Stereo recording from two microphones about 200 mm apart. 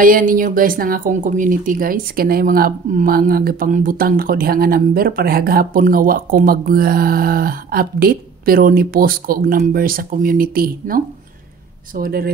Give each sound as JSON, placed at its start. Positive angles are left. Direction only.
{"t": 0.0, "sound": "a woman's voice", "side_deg": -45}
{"t": 12.0, "sound": "a woman's voice", "side_deg": -50}